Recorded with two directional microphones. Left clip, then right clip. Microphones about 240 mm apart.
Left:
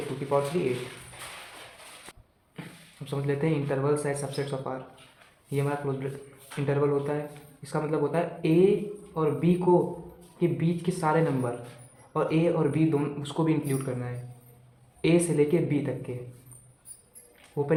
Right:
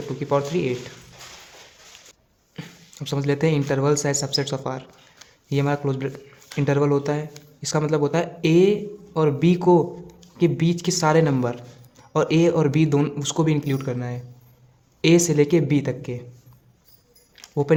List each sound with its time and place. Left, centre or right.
0.2 s a man's voice: right
2.6 s a man's voice: right
17.3 s music: right